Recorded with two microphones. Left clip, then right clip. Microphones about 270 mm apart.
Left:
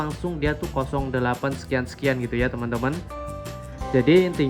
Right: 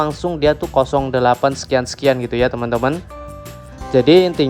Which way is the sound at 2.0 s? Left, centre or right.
Centre.